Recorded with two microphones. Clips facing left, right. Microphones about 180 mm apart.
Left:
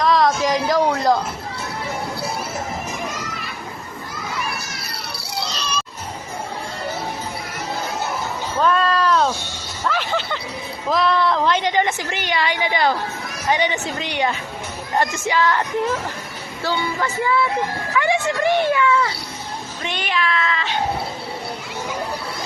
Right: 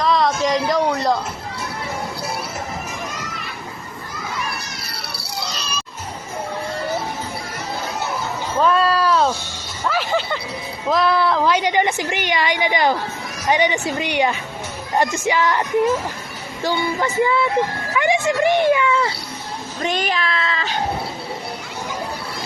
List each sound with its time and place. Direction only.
0.0 s a sound: centre (ahead or behind)
8.6 s a sound: 10° right (ahead or behind)
9.8 s music: 5° right (ahead or behind)
10.8 s a woman's voice: centre (ahead or behind)
16.6 s speech: 15° right (ahead or behind)
19.8 s cat: 40° right (ahead or behind)